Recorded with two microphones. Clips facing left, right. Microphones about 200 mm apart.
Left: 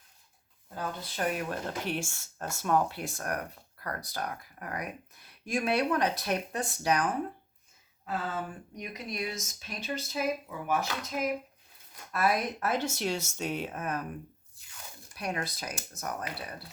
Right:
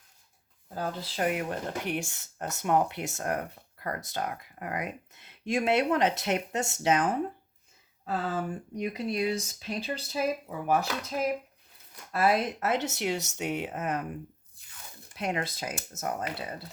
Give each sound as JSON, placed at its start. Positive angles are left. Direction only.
{"t": 0.7, "sound": "speech", "side_deg": -35}
{"t": 1.2, "sound": "speech", "side_deg": -20}
{"t": 15.1, "sound": "speech", "side_deg": -25}